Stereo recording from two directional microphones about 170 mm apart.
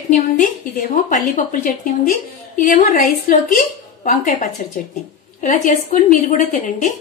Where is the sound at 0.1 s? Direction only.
50° left (ahead or behind).